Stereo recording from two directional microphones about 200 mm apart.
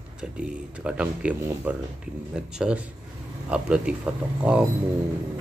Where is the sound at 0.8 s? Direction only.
5° right (ahead or behind).